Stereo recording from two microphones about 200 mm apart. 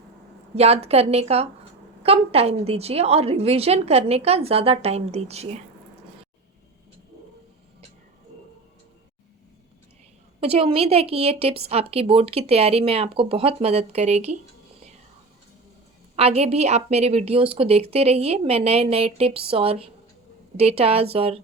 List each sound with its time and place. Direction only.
0.5 s a woman's voice: 30° right (ahead or behind)
10.4 s a woman's voice: 30° right (ahead or behind)
16.1 s a woman's voice: 30° right (ahead or behind)